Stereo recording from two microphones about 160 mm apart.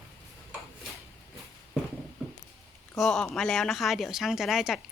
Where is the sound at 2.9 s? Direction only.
5° left (ahead or behind).